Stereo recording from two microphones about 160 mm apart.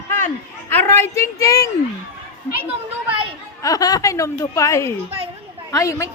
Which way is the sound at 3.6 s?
25° left (ahead or behind).